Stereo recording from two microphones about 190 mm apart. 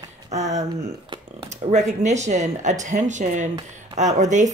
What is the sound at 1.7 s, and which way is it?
Speech, 40° right (ahead or behind).